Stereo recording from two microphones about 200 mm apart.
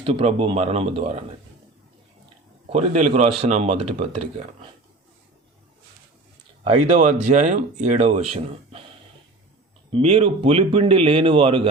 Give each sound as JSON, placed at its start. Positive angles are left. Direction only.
{"t": 0.0, "sound": "speech", "side_deg": -30}
{"t": 2.6, "sound": "speech", "side_deg": -30}
{"t": 6.7, "sound": "speech", "side_deg": -30}
{"t": 9.9, "sound": "speech", "side_deg": -30}